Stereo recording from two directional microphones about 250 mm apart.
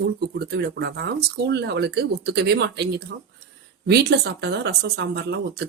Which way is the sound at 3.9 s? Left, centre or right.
Right.